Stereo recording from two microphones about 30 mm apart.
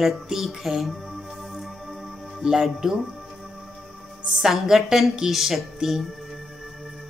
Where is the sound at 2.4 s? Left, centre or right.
Centre.